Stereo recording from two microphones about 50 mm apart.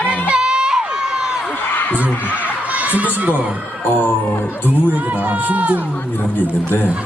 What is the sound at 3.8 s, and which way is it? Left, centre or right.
Speech, left.